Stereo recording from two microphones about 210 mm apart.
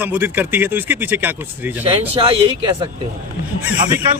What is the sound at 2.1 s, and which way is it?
Speech, 25° right (ahead or behind).